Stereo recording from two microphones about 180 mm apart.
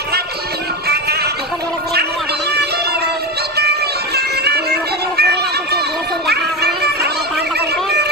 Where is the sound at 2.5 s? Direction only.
65° right (ahead or behind).